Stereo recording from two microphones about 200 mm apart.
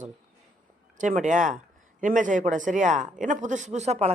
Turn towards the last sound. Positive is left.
turn(degrees=-35)  # may be behind; listen again after turning